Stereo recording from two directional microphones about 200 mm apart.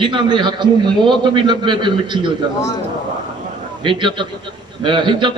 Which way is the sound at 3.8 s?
25° right (ahead or behind).